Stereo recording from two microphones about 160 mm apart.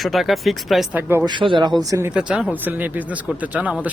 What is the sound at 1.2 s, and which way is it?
Speech, 30° right (ahead or behind).